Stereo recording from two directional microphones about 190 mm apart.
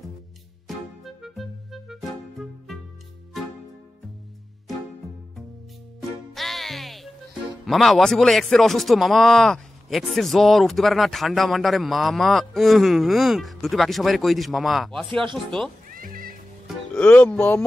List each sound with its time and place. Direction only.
0.7 s music: centre (ahead or behind)
6.3 s music: centre (ahead or behind)
7.6 s a man's voice: centre (ahead or behind)
15.9 s music: 50° right (ahead or behind)
16.6 s speech: 5° left (ahead or behind)